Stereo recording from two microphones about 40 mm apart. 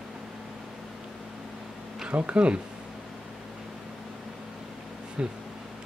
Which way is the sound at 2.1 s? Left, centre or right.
Right.